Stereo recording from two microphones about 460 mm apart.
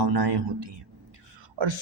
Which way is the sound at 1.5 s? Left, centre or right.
Right.